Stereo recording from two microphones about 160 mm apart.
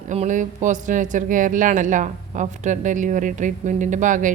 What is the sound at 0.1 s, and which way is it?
Speech, 50° right (ahead or behind).